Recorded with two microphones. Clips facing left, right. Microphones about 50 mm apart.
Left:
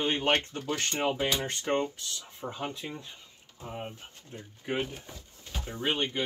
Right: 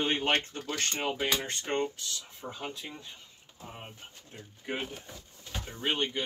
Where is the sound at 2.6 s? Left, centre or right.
Left.